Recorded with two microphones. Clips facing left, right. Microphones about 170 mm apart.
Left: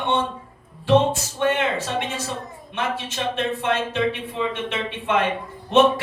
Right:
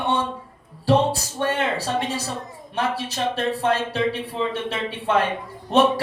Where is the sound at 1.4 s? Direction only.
35° right (ahead or behind).